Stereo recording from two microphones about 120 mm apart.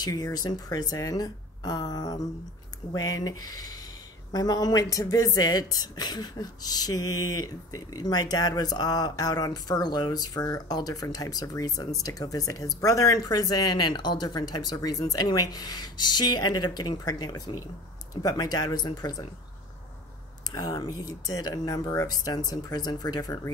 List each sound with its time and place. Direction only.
0.0 s speech: 30° left (ahead or behind)
20.5 s speech: 35° left (ahead or behind)